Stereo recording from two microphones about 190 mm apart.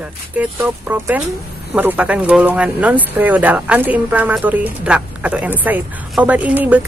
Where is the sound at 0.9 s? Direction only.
10° right (ahead or behind).